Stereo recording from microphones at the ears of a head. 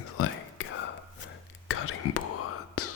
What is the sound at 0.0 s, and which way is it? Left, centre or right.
Whispering, left.